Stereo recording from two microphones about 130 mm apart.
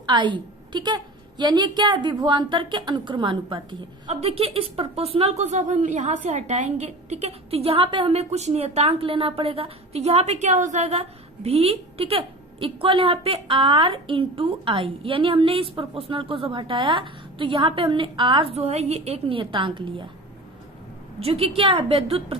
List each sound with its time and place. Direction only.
0.0 s a woman's voice: 35° right (ahead or behind)
4.1 s a woman's voice: 50° right (ahead or behind)
21.2 s a woman's voice: 50° right (ahead or behind)